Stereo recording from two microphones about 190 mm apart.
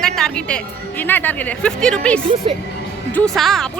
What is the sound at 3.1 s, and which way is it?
Speech, centre (ahead or behind).